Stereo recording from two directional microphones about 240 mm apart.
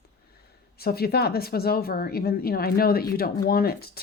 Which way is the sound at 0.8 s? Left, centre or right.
Left.